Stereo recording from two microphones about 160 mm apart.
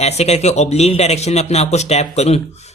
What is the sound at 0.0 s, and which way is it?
Speech, 45° left (ahead or behind).